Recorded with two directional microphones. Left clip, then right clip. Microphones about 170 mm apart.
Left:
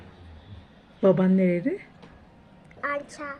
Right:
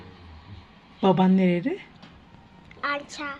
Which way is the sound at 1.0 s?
25° right (ahead or behind).